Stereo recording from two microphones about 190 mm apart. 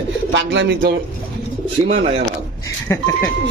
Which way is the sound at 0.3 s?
75° right (ahead or behind).